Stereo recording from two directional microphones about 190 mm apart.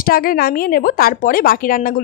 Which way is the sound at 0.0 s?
50° left (ahead or behind).